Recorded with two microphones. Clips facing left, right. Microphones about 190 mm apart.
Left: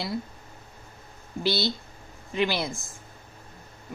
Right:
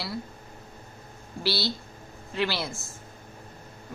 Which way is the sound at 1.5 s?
20° left (ahead or behind).